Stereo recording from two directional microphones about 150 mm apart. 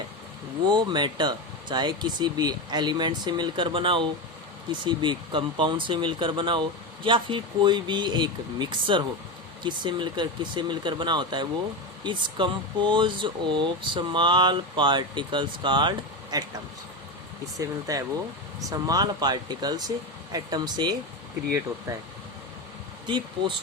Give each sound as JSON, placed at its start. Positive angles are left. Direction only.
{"t": 0.6, "sound": "speech", "side_deg": -30}
{"t": 17.6, "sound": "speech", "side_deg": -25}
{"t": 23.0, "sound": "speech", "side_deg": -30}